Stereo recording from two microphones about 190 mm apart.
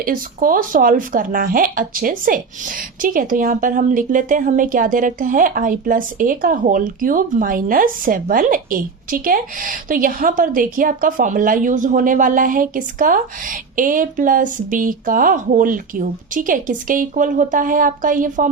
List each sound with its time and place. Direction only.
0.0 s speech: 50° right (ahead or behind)